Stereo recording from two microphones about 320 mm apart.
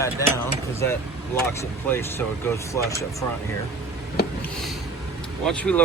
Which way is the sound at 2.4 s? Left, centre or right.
Centre.